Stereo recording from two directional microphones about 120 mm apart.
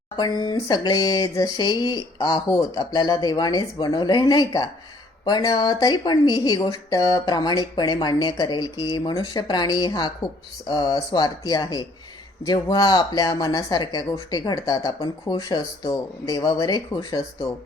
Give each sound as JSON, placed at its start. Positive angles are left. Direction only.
{"t": 0.2, "sound": "speech", "side_deg": 35}